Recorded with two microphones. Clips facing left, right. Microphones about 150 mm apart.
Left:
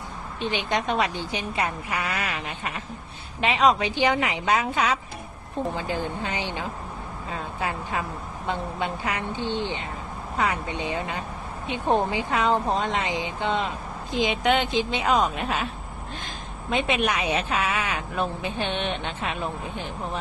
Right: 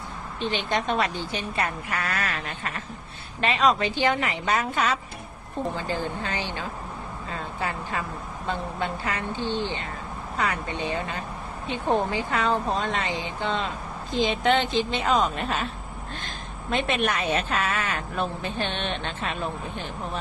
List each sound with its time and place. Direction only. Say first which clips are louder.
0.3 s speech: even; 15° left (ahead or behind)
16.6 s speech: left 1 dB; 10° left (ahead or behind)